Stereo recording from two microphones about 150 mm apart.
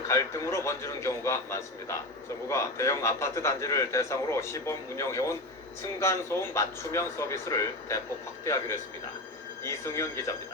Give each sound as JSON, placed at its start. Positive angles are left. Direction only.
{"t": 0.1, "sound": "a man's voice", "side_deg": 20}